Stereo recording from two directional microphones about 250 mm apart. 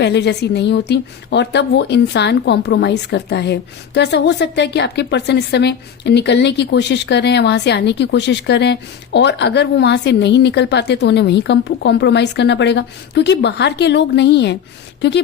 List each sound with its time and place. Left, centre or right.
0.0 s a woman's voice: left